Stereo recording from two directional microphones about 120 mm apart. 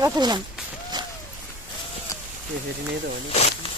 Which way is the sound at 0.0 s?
35° right (ahead or behind).